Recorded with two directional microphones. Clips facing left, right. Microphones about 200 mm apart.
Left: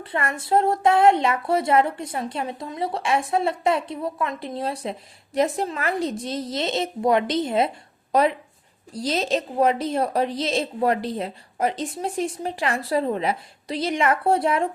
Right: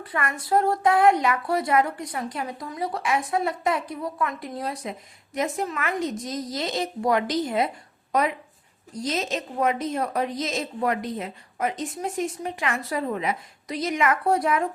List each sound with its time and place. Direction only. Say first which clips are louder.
0.0 s a woman's voice: left 2 dB; 25° left (ahead or behind)